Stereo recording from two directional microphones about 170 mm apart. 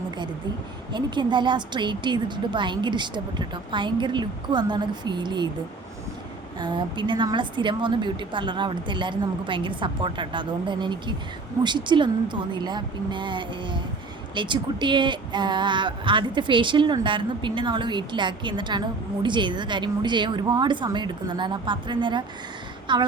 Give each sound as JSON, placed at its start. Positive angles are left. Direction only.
{"t": 0.9, "sound": "a woman's voice", "side_deg": -25}
{"t": 6.6, "sound": "a woman's voice", "side_deg": -25}